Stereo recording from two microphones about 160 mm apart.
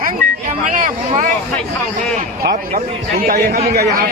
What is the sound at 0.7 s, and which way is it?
Speech, 55° right (ahead or behind).